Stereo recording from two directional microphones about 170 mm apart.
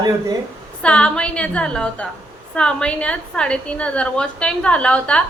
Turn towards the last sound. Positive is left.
turn(degrees=5)  # may be behind; listen again after turning